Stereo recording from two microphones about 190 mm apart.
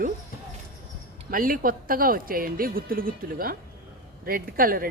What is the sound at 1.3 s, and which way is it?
Speech, 50° right (ahead or behind).